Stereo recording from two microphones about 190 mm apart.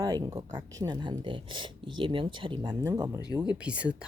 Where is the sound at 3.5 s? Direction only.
5° right (ahead or behind).